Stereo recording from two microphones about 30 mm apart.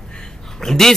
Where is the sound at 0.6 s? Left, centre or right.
Centre.